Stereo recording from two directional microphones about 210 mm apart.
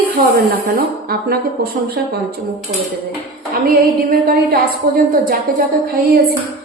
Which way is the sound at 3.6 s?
45° right (ahead or behind).